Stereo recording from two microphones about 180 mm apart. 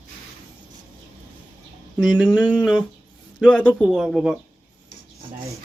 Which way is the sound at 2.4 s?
10° right (ahead or behind).